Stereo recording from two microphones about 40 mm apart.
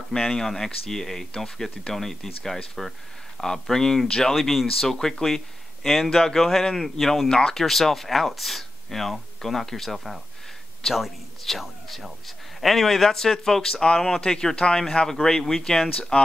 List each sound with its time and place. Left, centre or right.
0.1 s speech: centre
7.2 s speech: centre